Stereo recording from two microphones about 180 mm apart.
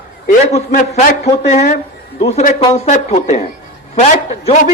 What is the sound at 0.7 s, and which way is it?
Speech, 50° left (ahead or behind).